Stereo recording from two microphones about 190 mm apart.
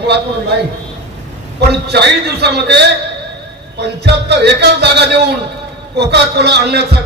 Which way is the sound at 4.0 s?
60° right (ahead or behind).